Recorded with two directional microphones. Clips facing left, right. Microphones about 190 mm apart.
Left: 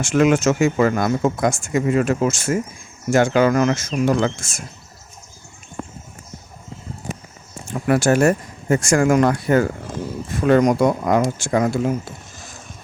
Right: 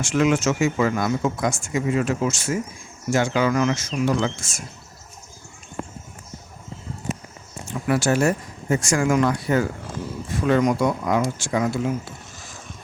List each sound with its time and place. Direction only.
0.0 s speech: 50° left (ahead or behind)
7.7 s speech: 50° left (ahead or behind)